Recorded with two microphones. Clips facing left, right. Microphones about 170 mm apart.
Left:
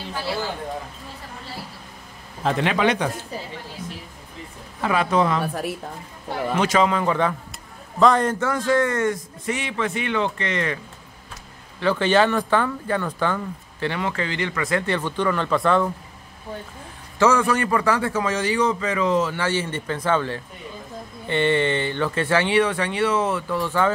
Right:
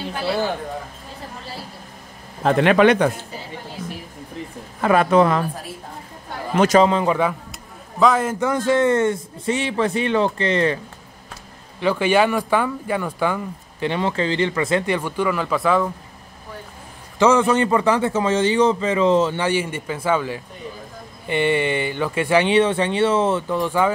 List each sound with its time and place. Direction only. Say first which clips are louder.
2.4 s a man's voice: right 6 dB; 55° right (ahead or behind)
4.8 s a man's voice: right 5 dB; 55° right (ahead or behind)
5.4 s speech: left 2 dB; 70° left (ahead or behind)
6.6 s speech: right 6 dB; 40° right (ahead or behind)
6.9 s a man's voice: right 3 dB; 20° right (ahead or behind)
8.0 s a man's voice: even; 5° right (ahead or behind)
8.5 s speech: right 6 dB; 25° right (ahead or behind)
11.8 s speech: right 1 dB; 10° right (ahead or behind)
15.0 s speech: right 1 dB; 10° right (ahead or behind)
17.2 s a man's voice: right 3 dB; 20° right (ahead or behind)